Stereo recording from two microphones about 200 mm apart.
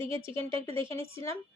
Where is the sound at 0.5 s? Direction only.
30° right (ahead or behind).